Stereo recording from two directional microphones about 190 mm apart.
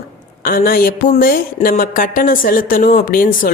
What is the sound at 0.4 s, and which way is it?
A woman's voice, 50° left (ahead or behind).